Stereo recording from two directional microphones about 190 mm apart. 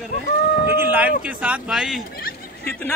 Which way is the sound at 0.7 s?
10° right (ahead or behind).